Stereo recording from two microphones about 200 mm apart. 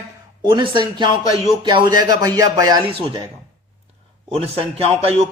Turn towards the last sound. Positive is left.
turn(degrees=-30)  # may be behind; listen again after turning